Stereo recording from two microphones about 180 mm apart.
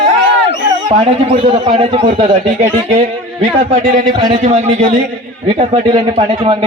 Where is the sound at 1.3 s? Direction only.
30° right (ahead or behind).